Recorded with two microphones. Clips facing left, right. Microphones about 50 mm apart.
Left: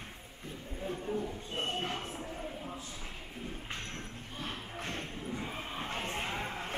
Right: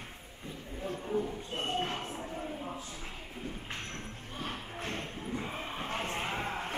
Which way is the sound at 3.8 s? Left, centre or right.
Centre.